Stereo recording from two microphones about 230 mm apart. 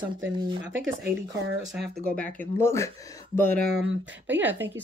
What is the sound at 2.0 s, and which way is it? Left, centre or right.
Speech, centre.